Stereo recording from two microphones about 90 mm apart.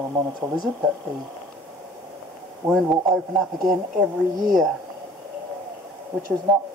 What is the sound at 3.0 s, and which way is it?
Speech, 5° right (ahead or behind).